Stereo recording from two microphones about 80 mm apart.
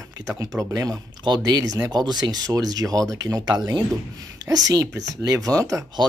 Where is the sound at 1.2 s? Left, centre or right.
Right.